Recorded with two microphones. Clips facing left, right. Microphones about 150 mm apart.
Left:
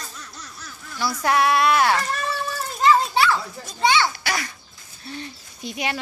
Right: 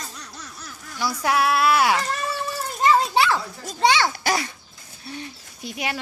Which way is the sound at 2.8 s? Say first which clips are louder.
Left 1 dB; 25° right (ahead or behind).